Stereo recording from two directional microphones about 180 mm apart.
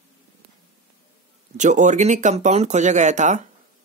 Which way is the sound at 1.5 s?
45° right (ahead or behind).